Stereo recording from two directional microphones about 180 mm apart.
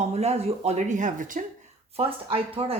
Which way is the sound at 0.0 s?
35° right (ahead or behind).